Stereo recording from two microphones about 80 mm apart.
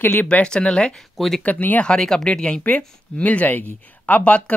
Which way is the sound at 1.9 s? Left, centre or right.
Centre.